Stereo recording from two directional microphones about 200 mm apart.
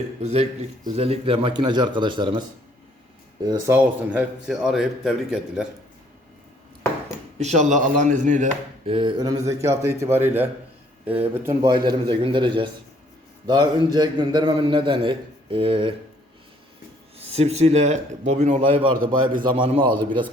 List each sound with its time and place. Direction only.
0.2 s a man's voice: 30° right (ahead or behind)
3.4 s a man's voice: 20° right (ahead or behind)
3.8 s a man's voice: 5° right (ahead or behind)
7.3 s speech: 35° right (ahead or behind)
8.9 s a man's voice: 25° right (ahead or behind)
17.2 s speech: 30° right (ahead or behind)
18.9 s a man's voice: 45° right (ahead or behind)
19.4 s a man's voice: 25° right (ahead or behind)